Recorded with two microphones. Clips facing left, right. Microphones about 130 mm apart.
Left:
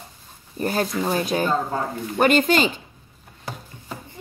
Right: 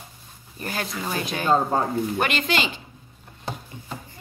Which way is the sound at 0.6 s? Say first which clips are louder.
Left 7 dB; 35° left (ahead or behind).